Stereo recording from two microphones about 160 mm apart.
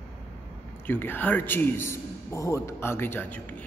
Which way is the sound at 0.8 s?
10° left (ahead or behind).